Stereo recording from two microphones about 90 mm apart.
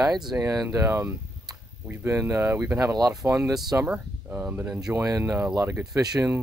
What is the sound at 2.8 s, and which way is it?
Speech, 40° right (ahead or behind).